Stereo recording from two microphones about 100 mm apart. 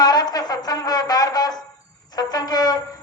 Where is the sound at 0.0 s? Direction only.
40° left (ahead or behind).